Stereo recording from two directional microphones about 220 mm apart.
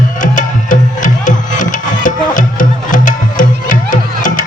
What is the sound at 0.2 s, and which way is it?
Music, 35° left (ahead or behind).